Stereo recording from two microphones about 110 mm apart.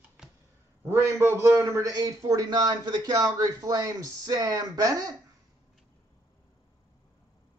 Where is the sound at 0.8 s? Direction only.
25° right (ahead or behind).